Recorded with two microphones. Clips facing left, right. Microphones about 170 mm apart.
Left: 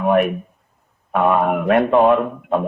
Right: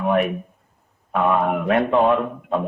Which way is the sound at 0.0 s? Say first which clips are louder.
Left 3 dB; 55° left (ahead or behind).